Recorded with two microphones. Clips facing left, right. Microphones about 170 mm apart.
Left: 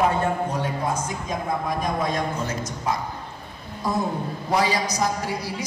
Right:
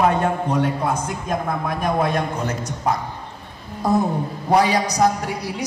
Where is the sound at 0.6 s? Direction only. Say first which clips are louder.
Right 4 dB; 60° right (ahead or behind).